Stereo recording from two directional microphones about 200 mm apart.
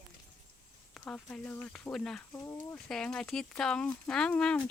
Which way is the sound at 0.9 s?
5° left (ahead or behind).